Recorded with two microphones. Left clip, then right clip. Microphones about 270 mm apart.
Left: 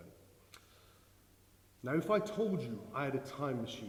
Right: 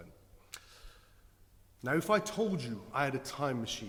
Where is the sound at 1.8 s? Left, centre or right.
Right.